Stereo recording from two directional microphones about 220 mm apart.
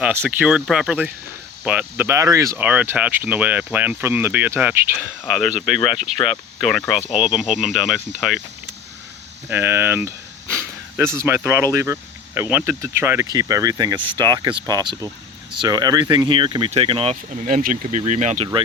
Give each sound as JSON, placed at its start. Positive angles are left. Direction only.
{"t": 0.0, "sound": "speech", "side_deg": -5}
{"t": 9.5, "sound": "speech", "side_deg": -10}
{"t": 17.4, "sound": "speech", "side_deg": -35}